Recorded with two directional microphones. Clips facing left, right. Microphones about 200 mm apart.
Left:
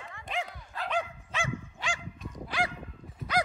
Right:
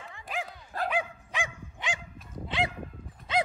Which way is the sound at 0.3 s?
5° right (ahead or behind).